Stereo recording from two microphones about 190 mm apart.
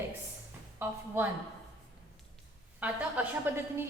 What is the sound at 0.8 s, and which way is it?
Speech, 10° right (ahead or behind).